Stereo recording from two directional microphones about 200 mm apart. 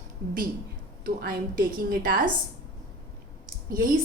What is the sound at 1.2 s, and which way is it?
Speech, 45° right (ahead or behind).